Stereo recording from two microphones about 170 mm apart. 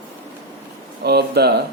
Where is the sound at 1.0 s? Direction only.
70° right (ahead or behind).